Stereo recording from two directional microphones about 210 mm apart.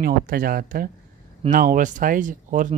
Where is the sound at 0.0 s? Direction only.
45° right (ahead or behind).